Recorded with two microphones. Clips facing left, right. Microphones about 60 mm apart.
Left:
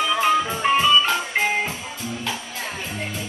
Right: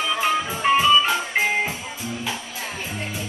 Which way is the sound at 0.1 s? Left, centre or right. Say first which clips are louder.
Left 2 dB; centre.